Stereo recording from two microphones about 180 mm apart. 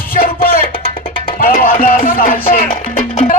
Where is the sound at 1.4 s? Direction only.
55° left (ahead or behind).